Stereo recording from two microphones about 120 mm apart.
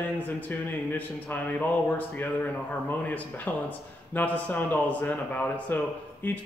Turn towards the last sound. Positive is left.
turn(degrees=15)  # may be behind; listen again after turning